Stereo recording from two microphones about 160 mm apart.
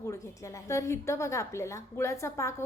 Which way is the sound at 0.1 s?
20° left (ahead or behind).